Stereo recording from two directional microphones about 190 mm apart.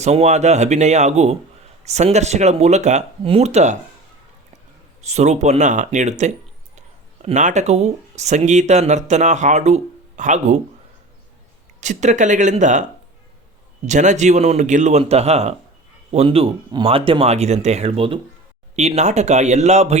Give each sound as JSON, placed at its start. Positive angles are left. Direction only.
{"t": 0.0, "sound": "a man's voice", "side_deg": -35}
{"t": 11.8, "sound": "a man's voice", "side_deg": -40}
{"t": 13.8, "sound": "a man's voice", "side_deg": -40}